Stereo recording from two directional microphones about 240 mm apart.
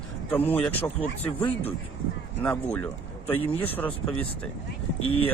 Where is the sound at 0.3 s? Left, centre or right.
Centre.